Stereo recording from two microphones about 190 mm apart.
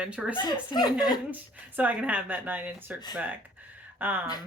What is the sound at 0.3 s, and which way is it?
Speech, 25° left (ahead or behind).